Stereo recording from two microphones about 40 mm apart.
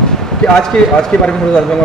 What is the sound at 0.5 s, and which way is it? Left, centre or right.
Speech, centre.